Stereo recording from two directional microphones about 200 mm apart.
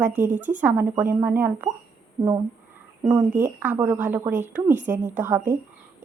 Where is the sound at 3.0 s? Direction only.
15° right (ahead or behind).